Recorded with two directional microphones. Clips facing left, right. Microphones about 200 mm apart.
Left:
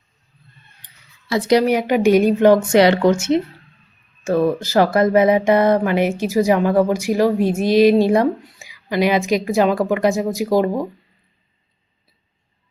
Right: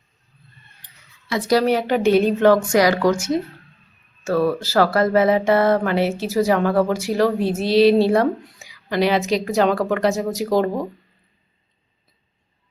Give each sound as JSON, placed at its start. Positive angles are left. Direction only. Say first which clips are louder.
{"t": 1.4, "sound": "a woman's voice", "louder": "left 2 dB", "side_deg": 20}